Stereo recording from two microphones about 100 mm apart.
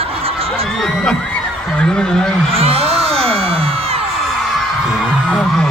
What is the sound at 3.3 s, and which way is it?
Music, 75° right (ahead or behind).